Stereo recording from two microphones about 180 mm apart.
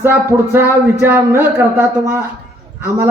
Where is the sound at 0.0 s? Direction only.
15° right (ahead or behind).